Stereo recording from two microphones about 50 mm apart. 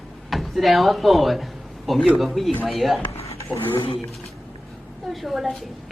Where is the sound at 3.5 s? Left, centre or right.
Left.